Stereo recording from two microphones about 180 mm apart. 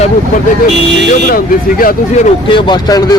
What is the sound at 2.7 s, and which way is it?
Speech, 20° left (ahead or behind).